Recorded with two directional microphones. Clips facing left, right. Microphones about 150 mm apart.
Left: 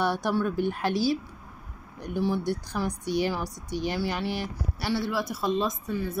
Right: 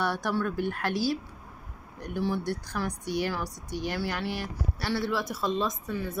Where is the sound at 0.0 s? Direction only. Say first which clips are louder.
Left 3 dB; 20° left (ahead or behind).